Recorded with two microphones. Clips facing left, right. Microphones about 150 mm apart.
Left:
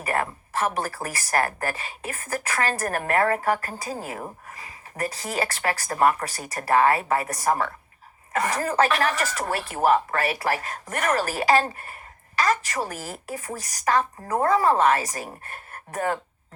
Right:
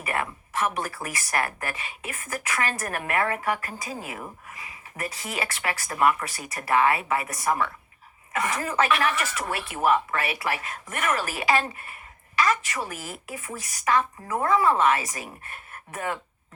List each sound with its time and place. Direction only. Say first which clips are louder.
0.0 s speech: left 3 dB; 35° left (ahead or behind)